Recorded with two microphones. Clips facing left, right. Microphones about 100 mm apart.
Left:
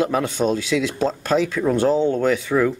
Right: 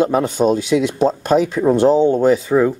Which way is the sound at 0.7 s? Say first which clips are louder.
Right 5 dB; 25° right (ahead or behind).